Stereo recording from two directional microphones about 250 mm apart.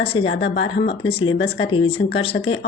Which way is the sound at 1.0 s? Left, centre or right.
Left.